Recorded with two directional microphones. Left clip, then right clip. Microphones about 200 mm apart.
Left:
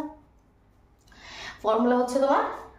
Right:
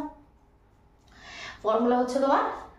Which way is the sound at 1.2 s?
45° left (ahead or behind).